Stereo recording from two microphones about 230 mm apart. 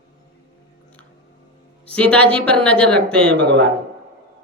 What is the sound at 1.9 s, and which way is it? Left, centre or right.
A woman's voice, centre.